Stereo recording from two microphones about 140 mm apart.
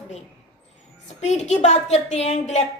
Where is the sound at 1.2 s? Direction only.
50° left (ahead or behind).